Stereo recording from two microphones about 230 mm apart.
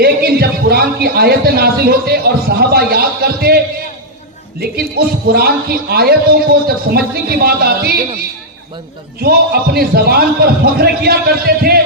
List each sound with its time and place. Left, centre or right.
0.0 s a man's voice: right
4.6 s a man's voice: right
9.2 s a man's voice: right